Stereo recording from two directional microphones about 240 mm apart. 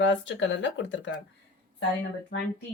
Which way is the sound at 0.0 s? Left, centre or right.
Left.